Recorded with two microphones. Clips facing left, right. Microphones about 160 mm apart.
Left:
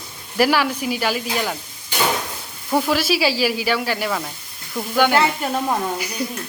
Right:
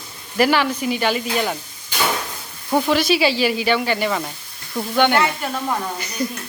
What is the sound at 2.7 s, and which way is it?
A woman's voice, 5° left (ahead or behind).